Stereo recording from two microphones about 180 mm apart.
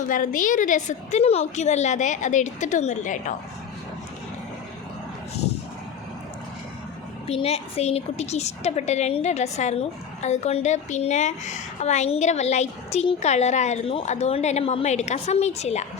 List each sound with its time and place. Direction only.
0.1 s a woman's voice: 45° left (ahead or behind)
7.3 s a woman's voice: 35° left (ahead or behind)